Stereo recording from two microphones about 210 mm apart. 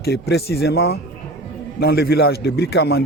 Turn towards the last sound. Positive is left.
turn(degrees=50)  # may be behind; listen again after turning